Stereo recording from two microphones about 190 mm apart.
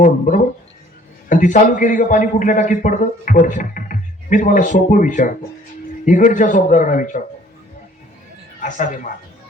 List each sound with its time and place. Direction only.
0.0 s a man's voice: 40° left (ahead or behind)
8.6 s a man's voice: 40° left (ahead or behind)